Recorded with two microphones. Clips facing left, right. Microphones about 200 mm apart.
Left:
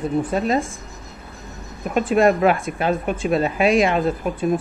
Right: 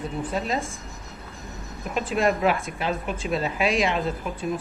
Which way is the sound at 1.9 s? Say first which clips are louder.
Left 7 dB; 50° left (ahead or behind).